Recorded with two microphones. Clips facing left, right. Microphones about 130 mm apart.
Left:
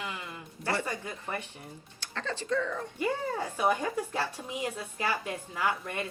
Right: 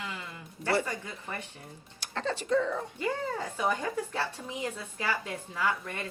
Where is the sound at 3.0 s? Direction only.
15° left (ahead or behind).